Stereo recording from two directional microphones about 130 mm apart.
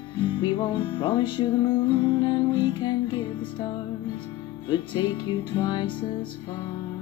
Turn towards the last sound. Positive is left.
turn(degrees=35)  # may be behind; listen again after turning